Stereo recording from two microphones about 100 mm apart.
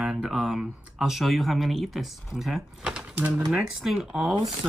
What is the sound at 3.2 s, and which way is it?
Speech, 20° right (ahead or behind).